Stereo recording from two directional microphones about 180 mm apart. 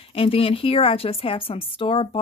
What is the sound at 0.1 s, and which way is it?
A woman's voice, 30° left (ahead or behind).